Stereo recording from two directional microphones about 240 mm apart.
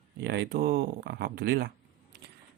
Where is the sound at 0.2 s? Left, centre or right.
Right.